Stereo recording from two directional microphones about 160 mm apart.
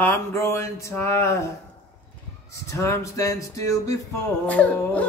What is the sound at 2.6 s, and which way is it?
Speech, 15° left (ahead or behind).